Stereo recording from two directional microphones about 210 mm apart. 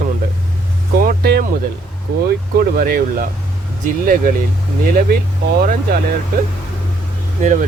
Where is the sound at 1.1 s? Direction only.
50° right (ahead or behind).